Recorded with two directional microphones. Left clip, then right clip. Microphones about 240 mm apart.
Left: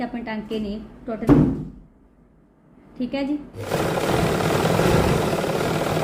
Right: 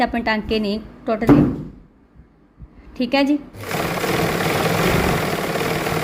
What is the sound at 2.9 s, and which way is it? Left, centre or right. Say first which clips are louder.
Speech: right 8 dB; right.